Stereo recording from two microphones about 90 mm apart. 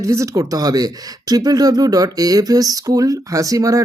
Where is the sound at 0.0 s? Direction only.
35° right (ahead or behind).